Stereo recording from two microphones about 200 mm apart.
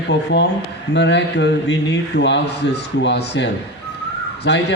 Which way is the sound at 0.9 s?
60° left (ahead or behind).